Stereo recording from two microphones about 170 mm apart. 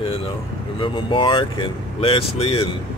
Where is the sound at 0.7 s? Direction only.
30° left (ahead or behind).